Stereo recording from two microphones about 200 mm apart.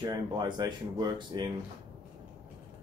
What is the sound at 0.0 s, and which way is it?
Speech, 20° right (ahead or behind).